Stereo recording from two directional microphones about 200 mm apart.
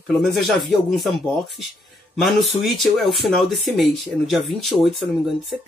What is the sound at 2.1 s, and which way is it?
Speech, centre (ahead or behind).